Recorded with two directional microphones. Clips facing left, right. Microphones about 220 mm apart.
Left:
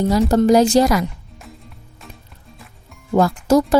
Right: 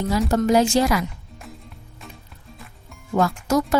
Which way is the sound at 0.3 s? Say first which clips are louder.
Left 4 dB; 35° left (ahead or behind).